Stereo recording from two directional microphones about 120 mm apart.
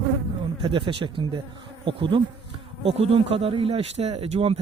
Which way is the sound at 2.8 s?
55° right (ahead or behind).